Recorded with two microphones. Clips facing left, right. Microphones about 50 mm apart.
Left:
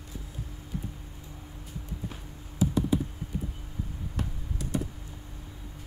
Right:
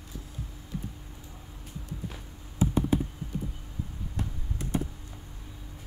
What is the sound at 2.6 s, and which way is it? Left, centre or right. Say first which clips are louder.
Computer keyboard: even; right.